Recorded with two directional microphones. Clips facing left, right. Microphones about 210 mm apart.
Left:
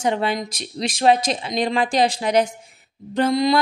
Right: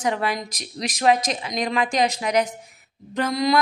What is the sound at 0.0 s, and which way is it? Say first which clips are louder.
A woman's voice: left 3 dB; 25° left (ahead or behind).